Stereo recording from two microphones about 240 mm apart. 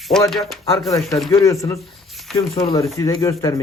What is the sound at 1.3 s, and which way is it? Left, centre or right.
A man's voice, centre.